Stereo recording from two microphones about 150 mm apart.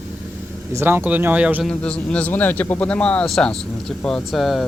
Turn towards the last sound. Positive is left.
turn(degrees=0)  # may be behind; listen again after turning